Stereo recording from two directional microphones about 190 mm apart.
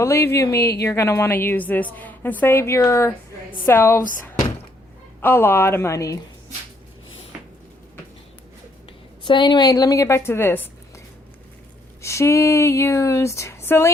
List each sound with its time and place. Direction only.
0.0 s a woman's voice: 15° left (ahead or behind)
5.2 s a woman's voice: 10° left (ahead or behind)
9.2 s a woman's voice: 25° left (ahead or behind)
12.0 s a woman's voice: 15° left (ahead or behind)